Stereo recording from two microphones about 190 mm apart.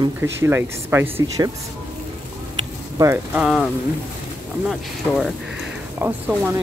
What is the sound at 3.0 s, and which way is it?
Speech, 15° right (ahead or behind).